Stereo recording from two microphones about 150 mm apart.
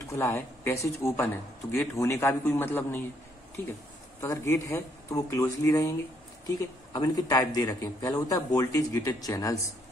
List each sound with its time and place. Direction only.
0.1 s speech: 15° left (ahead or behind)
4.2 s a man's voice: 20° left (ahead or behind)
6.9 s a man's voice: 25° left (ahead or behind)